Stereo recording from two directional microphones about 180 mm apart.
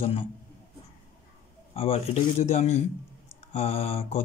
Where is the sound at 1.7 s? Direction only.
35° left (ahead or behind).